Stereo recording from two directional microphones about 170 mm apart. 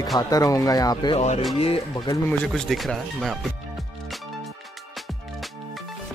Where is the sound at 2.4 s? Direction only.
Centre (ahead or behind).